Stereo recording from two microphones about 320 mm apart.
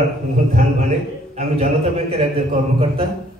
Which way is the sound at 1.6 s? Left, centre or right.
Centre.